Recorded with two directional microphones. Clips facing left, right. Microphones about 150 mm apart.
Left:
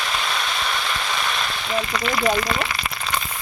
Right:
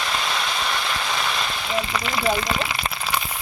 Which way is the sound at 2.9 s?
5° right (ahead or behind).